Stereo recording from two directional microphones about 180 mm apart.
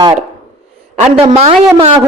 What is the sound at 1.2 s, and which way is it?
Speech, 30° right (ahead or behind).